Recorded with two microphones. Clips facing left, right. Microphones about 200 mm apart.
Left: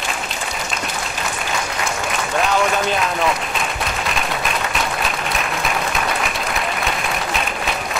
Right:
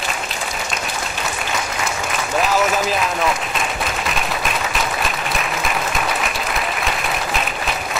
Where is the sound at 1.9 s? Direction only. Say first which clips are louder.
Even; centre (ahead or behind).